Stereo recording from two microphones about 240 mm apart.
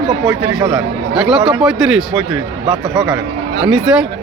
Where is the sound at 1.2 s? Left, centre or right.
Centre.